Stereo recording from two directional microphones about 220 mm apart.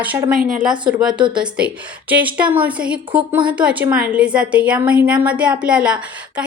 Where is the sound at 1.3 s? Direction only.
5° right (ahead or behind).